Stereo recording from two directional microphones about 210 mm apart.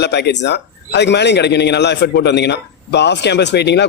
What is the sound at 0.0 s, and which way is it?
A man's voice, 55° left (ahead or behind).